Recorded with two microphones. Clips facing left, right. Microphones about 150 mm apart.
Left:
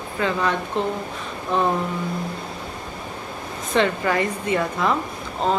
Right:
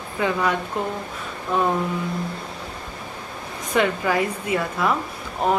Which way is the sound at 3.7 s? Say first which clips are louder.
Even; 5° right (ahead or behind).